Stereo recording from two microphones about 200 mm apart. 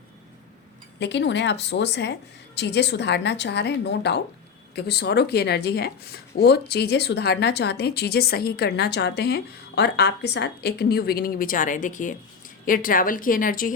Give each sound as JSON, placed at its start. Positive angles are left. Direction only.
{"t": 0.9, "sound": "a woman's voice", "side_deg": 60}